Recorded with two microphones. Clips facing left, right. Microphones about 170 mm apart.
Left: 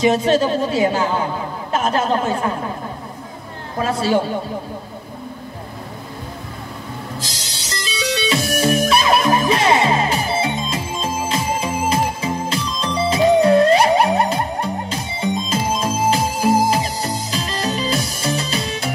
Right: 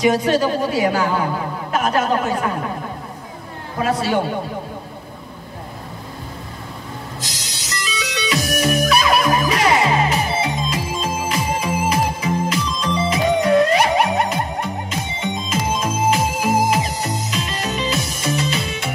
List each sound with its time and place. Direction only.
0.0 s a woman's voice: 25° left (ahead or behind)
3.8 s a woman's voice: 30° left (ahead or behind)
7.2 s music: 30° left (ahead or behind)